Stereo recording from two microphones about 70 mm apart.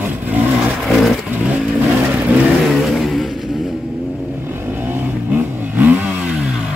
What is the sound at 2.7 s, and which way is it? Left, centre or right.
Vehicle, centre.